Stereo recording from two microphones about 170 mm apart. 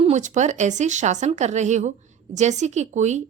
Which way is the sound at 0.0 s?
45° right (ahead or behind).